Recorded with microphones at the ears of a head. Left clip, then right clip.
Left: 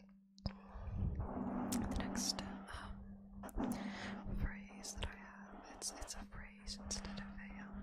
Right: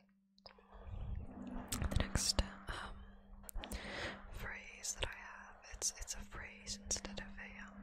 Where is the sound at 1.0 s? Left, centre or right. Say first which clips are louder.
Left 9 dB; left.